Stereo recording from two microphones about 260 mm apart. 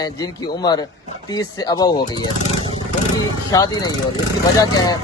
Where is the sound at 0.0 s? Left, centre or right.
Centre.